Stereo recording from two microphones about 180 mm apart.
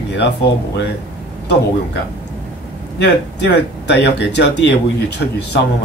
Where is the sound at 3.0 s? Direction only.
70° left (ahead or behind).